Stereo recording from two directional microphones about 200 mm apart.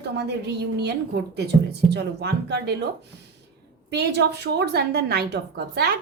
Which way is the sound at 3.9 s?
55° right (ahead or behind).